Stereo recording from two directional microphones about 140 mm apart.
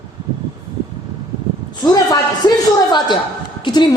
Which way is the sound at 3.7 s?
30° left (ahead or behind).